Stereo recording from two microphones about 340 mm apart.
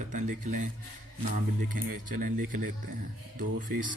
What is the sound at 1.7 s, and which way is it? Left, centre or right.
Speech, right.